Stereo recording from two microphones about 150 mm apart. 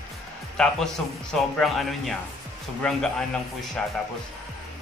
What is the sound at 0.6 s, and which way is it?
A man's voice, 5° left (ahead or behind).